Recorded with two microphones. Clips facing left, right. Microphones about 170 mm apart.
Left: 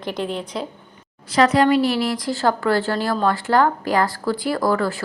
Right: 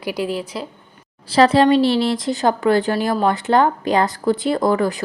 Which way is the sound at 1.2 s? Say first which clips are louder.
Right 3 dB; 30° right (ahead or behind).